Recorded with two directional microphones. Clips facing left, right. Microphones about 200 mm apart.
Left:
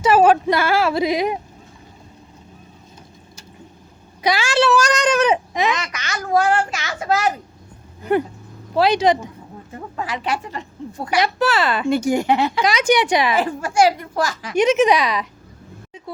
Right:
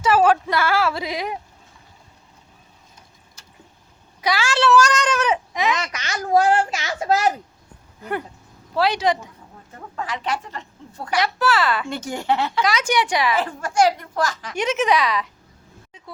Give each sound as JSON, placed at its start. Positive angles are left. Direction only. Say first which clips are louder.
{"t": 0.0, "sound": "speech", "louder": "left 3 dB", "side_deg": 15}
{"t": 4.2, "sound": "speech", "louder": "left 3 dB", "side_deg": 20}
{"t": 5.9, "sound": "a woman's voice", "louder": "right 1 dB", "side_deg": -35}
{"t": 8.7, "sound": "speech", "louder": "left 4 dB", "side_deg": 20}
{"t": 9.7, "sound": "speech", "louder": "left 2 dB", "side_deg": 10}